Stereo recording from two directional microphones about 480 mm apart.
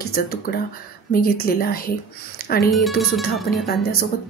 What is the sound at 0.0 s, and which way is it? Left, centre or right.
A woman's voice, centre.